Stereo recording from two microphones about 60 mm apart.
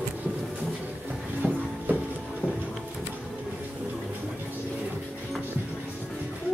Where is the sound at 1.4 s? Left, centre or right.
Centre.